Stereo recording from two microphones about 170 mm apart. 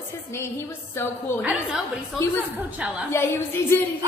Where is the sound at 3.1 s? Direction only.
15° left (ahead or behind).